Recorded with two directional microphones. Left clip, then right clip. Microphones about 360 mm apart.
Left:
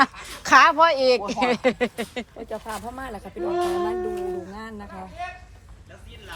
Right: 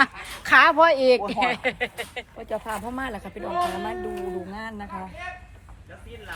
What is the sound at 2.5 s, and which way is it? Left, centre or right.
Speech, right.